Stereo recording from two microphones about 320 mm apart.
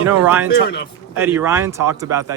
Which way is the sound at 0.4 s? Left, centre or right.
Left.